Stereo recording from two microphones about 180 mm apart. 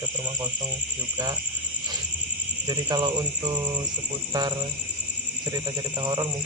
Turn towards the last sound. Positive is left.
turn(degrees=-25)  # may be behind; listen again after turning